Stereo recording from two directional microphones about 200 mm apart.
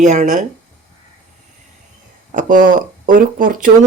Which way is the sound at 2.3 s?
40° right (ahead or behind).